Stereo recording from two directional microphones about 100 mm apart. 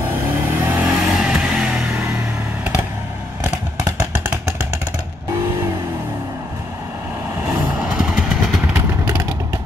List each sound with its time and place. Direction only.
0.6 s vehicle: 20° right (ahead or behind)
7.4 s vehicle: 10° right (ahead or behind)